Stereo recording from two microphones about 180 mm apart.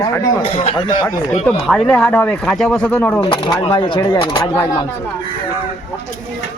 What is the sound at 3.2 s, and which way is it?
Speech, 30° left (ahead or behind).